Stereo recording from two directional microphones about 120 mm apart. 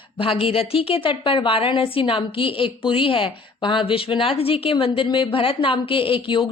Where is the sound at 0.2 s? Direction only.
50° left (ahead or behind).